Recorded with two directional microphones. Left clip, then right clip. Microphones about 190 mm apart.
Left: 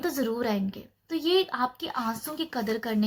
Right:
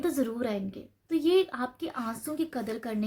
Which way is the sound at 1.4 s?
50° right (ahead or behind).